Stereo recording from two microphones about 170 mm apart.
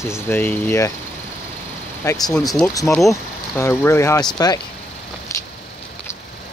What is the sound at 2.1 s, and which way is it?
Speech, 20° left (ahead or behind).